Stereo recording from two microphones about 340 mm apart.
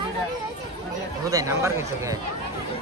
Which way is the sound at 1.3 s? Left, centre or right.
Centre.